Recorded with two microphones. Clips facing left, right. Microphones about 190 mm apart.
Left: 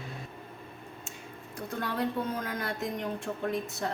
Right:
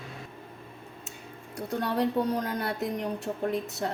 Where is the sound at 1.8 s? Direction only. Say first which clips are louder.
Right 5 dB; 40° right (ahead or behind).